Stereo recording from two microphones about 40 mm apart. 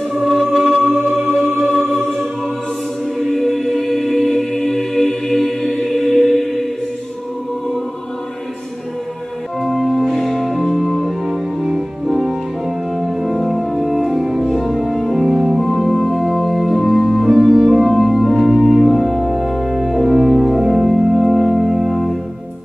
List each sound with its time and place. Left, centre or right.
0.1 s music: centre
3.2 s choir: centre
9.6 s music: centre
10.0 s music: centre
15.3 s organ: centre
15.6 s organ: centre
20.2 s music: centre